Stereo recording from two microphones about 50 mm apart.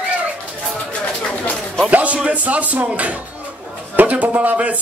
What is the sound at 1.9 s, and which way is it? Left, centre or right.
A man's voice, right.